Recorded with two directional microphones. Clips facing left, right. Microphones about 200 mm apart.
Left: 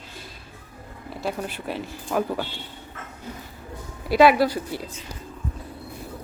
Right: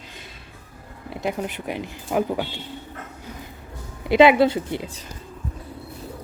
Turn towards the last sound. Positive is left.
turn(degrees=-20)  # may be behind; listen again after turning